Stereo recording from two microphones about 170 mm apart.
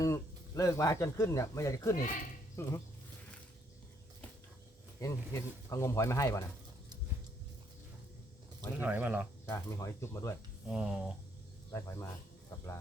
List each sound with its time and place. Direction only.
0.0 s speech: 20° left (ahead or behind)
4.9 s speech: 15° left (ahead or behind)
8.8 s speech: 10° right (ahead or behind)
9.5 s speech: 15° left (ahead or behind)
10.7 s speech: 5° right (ahead or behind)
11.7 s speech: 15° left (ahead or behind)